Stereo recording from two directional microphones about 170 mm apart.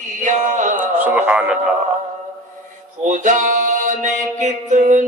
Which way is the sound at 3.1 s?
50° right (ahead or behind).